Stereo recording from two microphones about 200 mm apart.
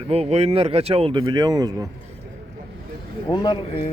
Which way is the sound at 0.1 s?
30° right (ahead or behind).